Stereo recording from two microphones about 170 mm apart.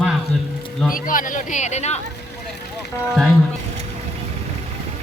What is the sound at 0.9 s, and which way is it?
Speech, 55° left (ahead or behind).